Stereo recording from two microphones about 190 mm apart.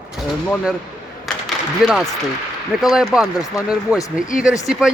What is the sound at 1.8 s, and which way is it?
Speech, 5° right (ahead or behind).